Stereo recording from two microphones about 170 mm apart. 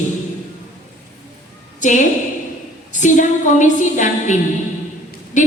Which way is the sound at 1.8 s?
45° left (ahead or behind).